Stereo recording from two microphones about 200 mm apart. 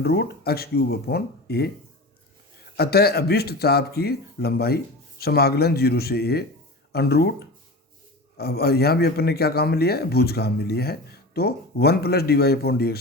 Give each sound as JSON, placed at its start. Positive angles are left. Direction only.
{"t": 0.0, "sound": "a man's voice", "side_deg": 50}
{"t": 2.7, "sound": "a man's voice", "side_deg": 50}